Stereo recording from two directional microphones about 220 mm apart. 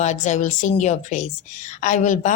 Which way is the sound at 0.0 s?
35° left (ahead or behind).